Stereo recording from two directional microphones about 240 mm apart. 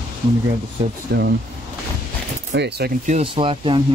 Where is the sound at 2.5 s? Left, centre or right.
Right.